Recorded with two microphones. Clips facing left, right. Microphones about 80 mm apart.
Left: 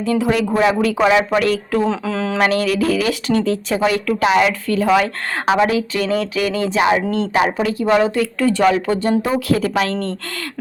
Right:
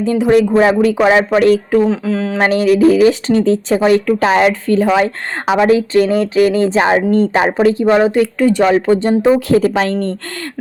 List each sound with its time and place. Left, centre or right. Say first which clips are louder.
0.0 s speech: right 6 dB; right
1.9 s speech: right 4 dB; centre
2.4 s speech: right 7 dB; right
9.9 s a woman's voice: right 4 dB; centre